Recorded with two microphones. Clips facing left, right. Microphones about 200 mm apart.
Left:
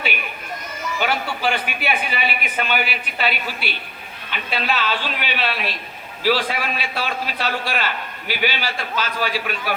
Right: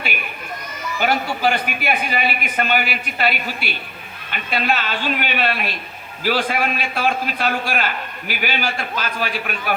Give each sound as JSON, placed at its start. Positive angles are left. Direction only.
{"t": 0.9, "sound": "a man's voice", "side_deg": -45}